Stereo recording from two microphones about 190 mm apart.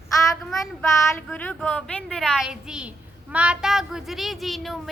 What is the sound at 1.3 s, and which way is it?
Speech, 10° left (ahead or behind).